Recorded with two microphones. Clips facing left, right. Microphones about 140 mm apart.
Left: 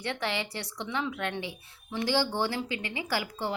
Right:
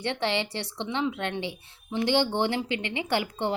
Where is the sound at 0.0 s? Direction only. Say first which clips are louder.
Right 4 dB; 25° right (ahead or behind).